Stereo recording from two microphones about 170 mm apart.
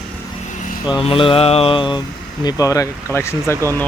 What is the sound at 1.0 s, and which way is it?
Mantra, 30° left (ahead or behind).